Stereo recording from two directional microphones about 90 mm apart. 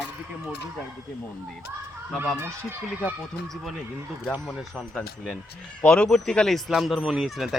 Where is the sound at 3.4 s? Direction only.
Centre (ahead or behind).